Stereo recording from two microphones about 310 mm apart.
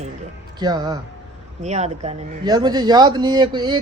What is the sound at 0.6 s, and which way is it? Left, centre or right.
A man's voice, centre.